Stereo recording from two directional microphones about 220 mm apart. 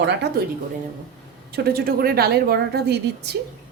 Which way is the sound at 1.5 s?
45° right (ahead or behind).